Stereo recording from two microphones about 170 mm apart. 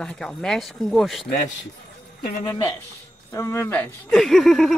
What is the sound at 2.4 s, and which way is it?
Speech, 25° left (ahead or behind).